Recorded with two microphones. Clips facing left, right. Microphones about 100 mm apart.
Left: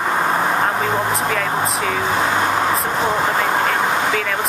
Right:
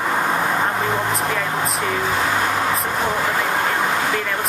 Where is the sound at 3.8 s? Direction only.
20° left (ahead or behind).